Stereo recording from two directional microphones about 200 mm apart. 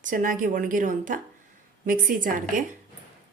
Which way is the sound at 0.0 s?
40° right (ahead or behind).